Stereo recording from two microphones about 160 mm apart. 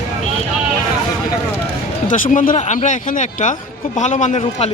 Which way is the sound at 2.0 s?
55° left (ahead or behind).